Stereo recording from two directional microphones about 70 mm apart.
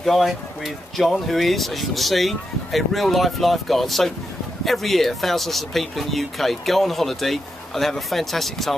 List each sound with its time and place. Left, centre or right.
0.0 s speech: centre